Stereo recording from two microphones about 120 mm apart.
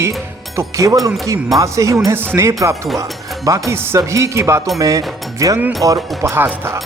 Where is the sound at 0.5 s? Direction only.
25° right (ahead or behind).